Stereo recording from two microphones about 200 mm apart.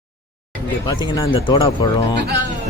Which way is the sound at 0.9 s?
20° left (ahead or behind).